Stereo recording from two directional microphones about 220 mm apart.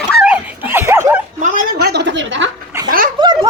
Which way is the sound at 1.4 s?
40° right (ahead or behind).